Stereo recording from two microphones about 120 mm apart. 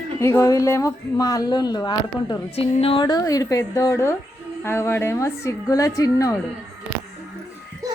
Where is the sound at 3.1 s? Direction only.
30° left (ahead or behind).